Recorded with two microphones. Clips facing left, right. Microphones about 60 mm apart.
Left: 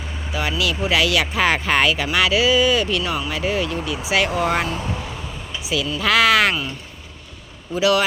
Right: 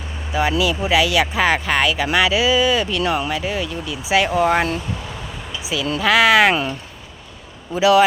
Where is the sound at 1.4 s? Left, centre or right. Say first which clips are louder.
Left 2 dB; centre.